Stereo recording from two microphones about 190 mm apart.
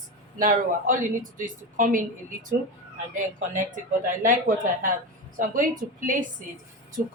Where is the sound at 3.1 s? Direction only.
45° right (ahead or behind).